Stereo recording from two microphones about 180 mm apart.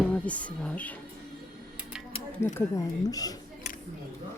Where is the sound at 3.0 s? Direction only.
20° left (ahead or behind).